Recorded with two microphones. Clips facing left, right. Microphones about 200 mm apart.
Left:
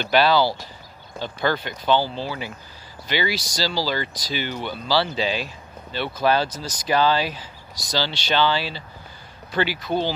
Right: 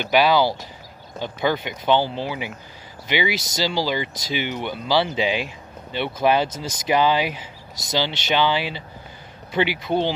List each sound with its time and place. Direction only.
0.0 s speech: 15° right (ahead or behind)